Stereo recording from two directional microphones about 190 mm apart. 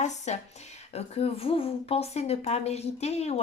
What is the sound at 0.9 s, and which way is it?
Speech, 30° left (ahead or behind).